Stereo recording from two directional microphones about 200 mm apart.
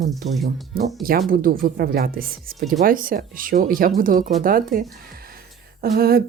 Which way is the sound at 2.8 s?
45° right (ahead or behind).